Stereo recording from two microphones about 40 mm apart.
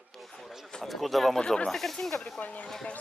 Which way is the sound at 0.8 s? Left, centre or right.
Centre.